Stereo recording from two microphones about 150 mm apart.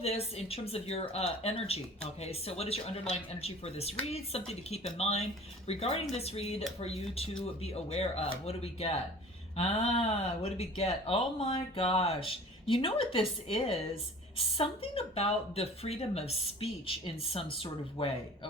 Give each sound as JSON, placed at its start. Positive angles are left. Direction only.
{"t": 0.0, "sound": "speech", "side_deg": 40}